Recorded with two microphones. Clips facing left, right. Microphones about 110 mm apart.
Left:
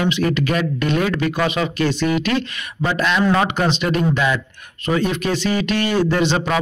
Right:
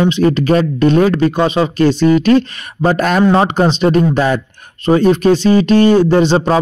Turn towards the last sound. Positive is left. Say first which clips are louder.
# right 7 dB
turn(degrees=-35)  # may be behind; listen again after turning